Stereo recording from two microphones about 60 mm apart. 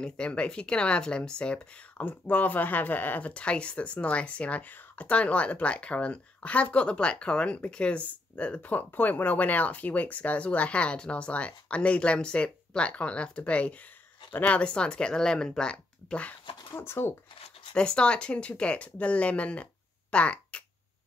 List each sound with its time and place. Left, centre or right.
0.0 s speech: centre
16.7 s speech: left
17.7 s speech: centre